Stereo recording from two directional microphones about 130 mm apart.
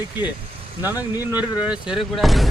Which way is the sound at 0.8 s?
15° right (ahead or behind).